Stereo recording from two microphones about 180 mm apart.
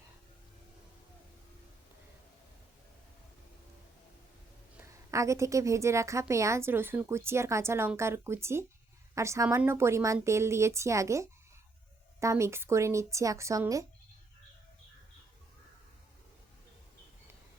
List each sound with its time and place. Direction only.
4.8 s a woman's voice: 15° right (ahead or behind)